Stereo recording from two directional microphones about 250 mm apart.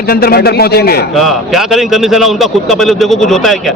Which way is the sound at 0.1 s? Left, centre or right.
Left.